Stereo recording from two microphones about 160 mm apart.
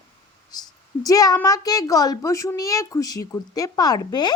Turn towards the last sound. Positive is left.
turn(degrees=25)  # may be behind; listen again after turning